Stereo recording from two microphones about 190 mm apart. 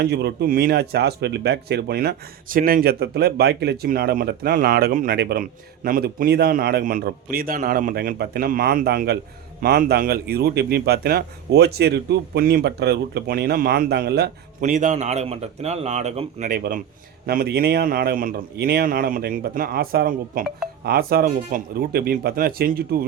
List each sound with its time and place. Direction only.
0.0 s speech: 60° right (ahead or behind)
14.6 s a man's voice: 40° right (ahead or behind)
16.6 s speech: 55° right (ahead or behind)